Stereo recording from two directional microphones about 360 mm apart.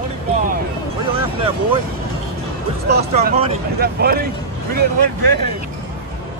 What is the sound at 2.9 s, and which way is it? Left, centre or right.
Speech, right.